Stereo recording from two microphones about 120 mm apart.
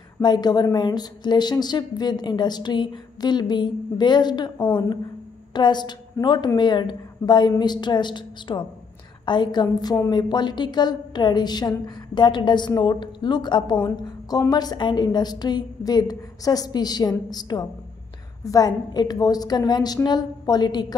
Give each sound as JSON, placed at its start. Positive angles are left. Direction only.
{"t": 0.2, "sound": "a woman's voice", "side_deg": 35}
{"t": 5.5, "sound": "a woman's voice", "side_deg": 40}